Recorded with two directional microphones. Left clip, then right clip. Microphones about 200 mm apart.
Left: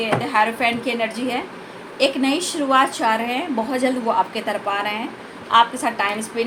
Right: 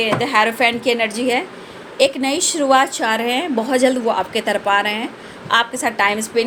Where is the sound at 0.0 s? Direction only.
50° right (ahead or behind).